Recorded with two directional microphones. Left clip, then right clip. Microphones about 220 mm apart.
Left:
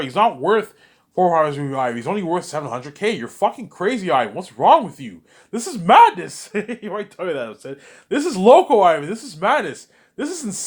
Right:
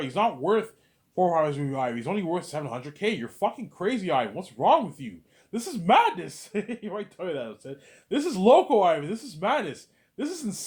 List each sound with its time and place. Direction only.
0.0 s speech: 20° left (ahead or behind)